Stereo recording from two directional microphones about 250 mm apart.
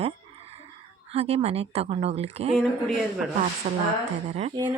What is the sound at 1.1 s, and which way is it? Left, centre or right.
Speech, right.